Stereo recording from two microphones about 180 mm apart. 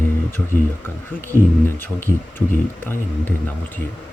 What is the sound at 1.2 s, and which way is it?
Speech, 10° left (ahead or behind).